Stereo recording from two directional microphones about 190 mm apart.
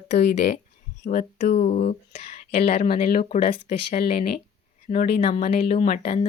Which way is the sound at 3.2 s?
30° left (ahead or behind).